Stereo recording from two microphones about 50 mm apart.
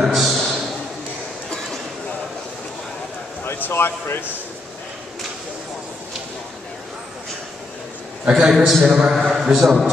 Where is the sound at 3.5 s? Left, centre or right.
Left.